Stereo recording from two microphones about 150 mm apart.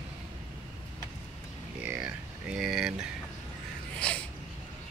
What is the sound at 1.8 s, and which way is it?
Speech, 10° right (ahead or behind).